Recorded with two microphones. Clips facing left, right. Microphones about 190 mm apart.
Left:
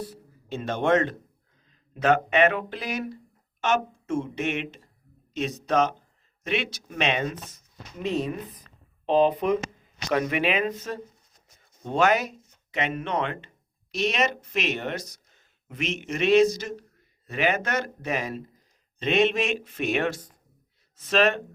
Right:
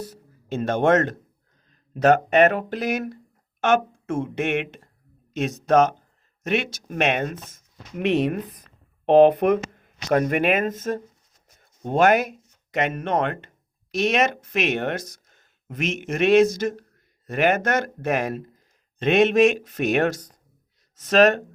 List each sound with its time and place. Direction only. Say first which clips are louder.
0.0 s speech: right 1 dB; 45° right (ahead or behind); by 8.4 s 70° right (ahead or behind)
9.0 s speech: right 7 dB; 60° right (ahead or behind); by 21.4 s 45° right (ahead or behind)